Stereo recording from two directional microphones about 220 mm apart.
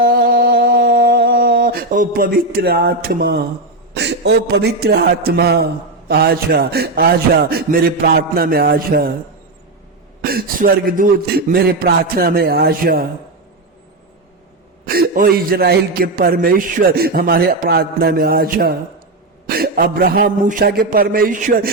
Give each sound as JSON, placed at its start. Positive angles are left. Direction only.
{"t": 0.0, "sound": "a sound", "side_deg": -45}
{"t": 3.9, "sound": "a man's voice", "side_deg": -50}
{"t": 10.2, "sound": "a man's voice", "side_deg": -45}
{"t": 14.8, "sound": "a man's voice", "side_deg": -45}